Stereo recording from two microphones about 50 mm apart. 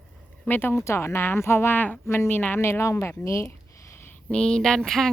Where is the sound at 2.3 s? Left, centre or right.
Left.